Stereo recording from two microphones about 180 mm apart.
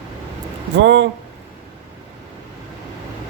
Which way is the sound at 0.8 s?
85° right.